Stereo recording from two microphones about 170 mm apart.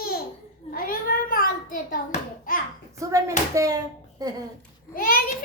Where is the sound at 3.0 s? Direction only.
20° right (ahead or behind).